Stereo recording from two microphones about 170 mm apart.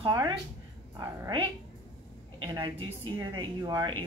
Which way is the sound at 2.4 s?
30° right (ahead or behind).